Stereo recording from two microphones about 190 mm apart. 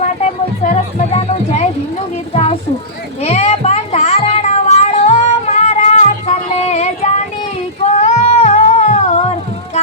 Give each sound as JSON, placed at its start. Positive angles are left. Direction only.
{"t": 0.6, "sound": "a child's voice", "side_deg": 35}
{"t": 3.2, "sound": "cat", "side_deg": 35}